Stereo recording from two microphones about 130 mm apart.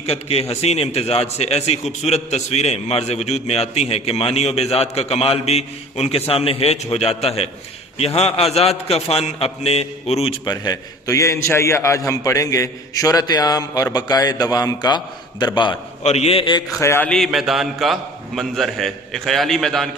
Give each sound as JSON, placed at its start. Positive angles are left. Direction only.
{"t": 0.0, "sound": "a man's voice", "side_deg": 50}
{"t": 10.4, "sound": "a man's voice", "side_deg": 35}
{"t": 16.0, "sound": "a man's voice", "side_deg": 55}
{"t": 16.8, "sound": "a man's voice", "side_deg": 20}
{"t": 17.1, "sound": "a man's voice", "side_deg": 0}